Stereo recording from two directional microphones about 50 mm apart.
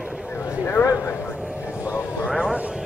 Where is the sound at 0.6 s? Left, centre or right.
Left.